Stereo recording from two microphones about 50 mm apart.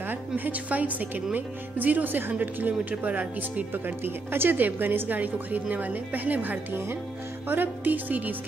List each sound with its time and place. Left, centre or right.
0.1 s speech: right
3.7 s speech: right